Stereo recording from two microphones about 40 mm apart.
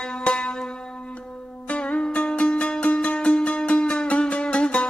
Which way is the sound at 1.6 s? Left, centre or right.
Left.